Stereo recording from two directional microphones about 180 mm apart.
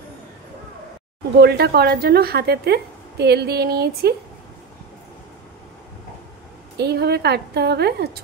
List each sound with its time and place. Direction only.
1.4 s a woman's voice: 60° right (ahead or behind)
6.8 s a woman's voice: 65° right (ahead or behind)